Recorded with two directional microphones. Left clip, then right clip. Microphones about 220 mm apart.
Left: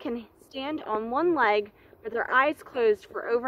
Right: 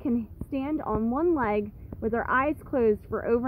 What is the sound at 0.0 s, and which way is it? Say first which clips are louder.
A woman's voice: right 4 dB; centre (ahead or behind).